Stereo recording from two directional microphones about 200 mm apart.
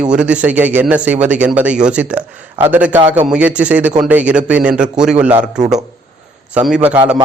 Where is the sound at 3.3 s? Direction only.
5° right (ahead or behind).